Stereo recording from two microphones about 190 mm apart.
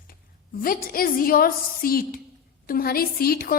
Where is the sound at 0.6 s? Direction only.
50° left (ahead or behind).